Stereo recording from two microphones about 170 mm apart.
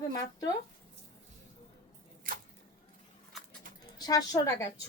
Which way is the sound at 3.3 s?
Centre (ahead or behind).